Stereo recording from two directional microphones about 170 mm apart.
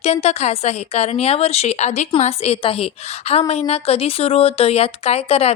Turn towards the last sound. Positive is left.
turn(degrees=35)  # may be behind; listen again after turning